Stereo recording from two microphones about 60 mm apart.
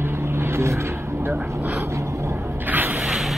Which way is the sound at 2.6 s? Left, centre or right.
Right.